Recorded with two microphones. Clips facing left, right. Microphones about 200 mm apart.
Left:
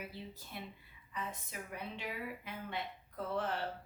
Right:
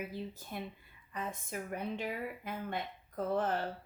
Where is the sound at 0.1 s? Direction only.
50° right (ahead or behind).